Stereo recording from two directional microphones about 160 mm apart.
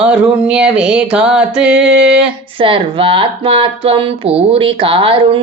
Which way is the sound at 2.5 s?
35° right (ahead or behind).